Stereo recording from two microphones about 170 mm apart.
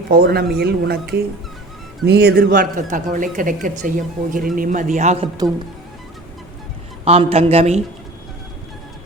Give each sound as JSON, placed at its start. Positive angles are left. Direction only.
{"t": 0.1, "sound": "speech", "side_deg": -65}
{"t": 7.0, "sound": "speech", "side_deg": -35}